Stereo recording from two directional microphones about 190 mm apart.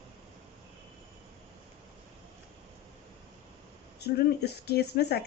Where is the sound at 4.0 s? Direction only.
60° left (ahead or behind).